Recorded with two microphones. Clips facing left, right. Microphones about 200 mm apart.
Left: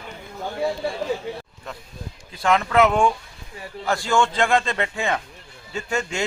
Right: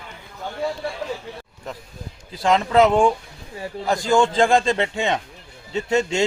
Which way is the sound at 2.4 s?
30° right (ahead or behind).